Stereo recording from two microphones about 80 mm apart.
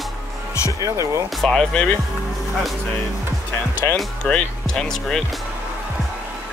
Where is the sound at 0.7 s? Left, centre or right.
Right.